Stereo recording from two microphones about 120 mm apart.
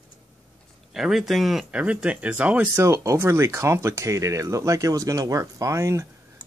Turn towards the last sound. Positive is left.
turn(degrees=-25)  # may be behind; listen again after turning